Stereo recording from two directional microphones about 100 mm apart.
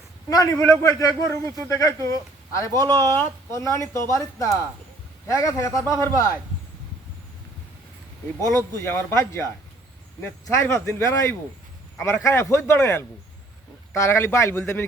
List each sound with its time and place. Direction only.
0.3 s a man's voice: 35° left (ahead or behind)
8.4 s a man's voice: 30° left (ahead or behind)